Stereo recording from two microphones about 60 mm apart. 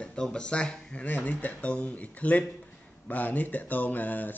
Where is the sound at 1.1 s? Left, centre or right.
Left.